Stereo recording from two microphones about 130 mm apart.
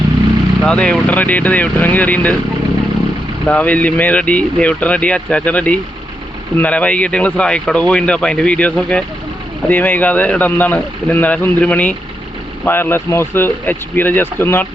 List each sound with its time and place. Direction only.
0.6 s speech: 10° left (ahead or behind)
3.4 s speech: 10° left (ahead or behind)